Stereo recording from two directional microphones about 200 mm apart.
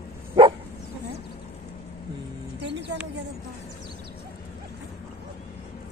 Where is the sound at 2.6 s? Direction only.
60° right (ahead or behind).